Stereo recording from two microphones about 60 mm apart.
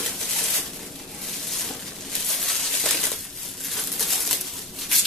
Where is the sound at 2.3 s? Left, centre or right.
Centre.